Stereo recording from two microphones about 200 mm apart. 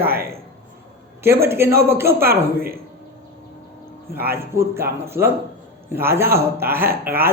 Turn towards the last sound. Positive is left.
turn(degrees=-10)  # may be behind; listen again after turning